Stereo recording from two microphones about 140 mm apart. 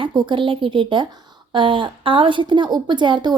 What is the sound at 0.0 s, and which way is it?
A woman's voice, 35° right (ahead or behind).